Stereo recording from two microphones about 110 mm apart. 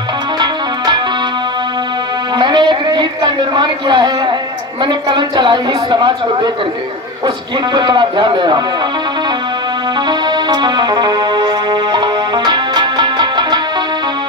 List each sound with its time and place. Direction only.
0.4 s music: 40° right (ahead or behind)
2.3 s a sound: 40° right (ahead or behind)
4.8 s a man's voice: 40° right (ahead or behind)
9.9 s music: 45° right (ahead or behind)